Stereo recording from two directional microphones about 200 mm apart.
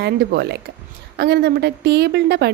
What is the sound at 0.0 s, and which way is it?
A woman's voice, 55° right (ahead or behind).